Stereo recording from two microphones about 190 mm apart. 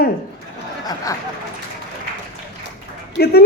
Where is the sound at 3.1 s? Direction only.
55° left (ahead or behind).